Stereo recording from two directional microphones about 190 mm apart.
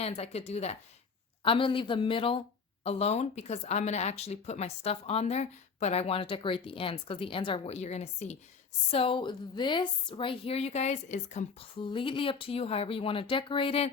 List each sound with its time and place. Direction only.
0.0 s a woman's voice: 30° left (ahead or behind)
11.8 s a woman's voice: 25° left (ahead or behind)